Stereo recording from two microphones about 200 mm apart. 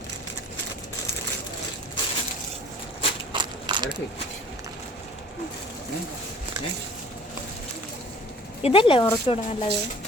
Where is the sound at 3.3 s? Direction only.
25° right (ahead or behind).